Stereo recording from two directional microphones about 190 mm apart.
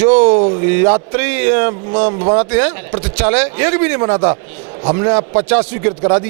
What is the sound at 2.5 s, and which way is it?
A man's voice, 10° right (ahead or behind).